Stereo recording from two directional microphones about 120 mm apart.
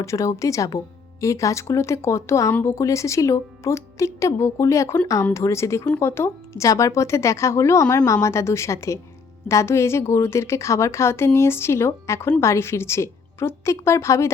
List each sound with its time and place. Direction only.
0.0 s a woman's voice: 25° left (ahead or behind)